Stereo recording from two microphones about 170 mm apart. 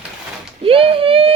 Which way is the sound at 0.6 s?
30° right (ahead or behind).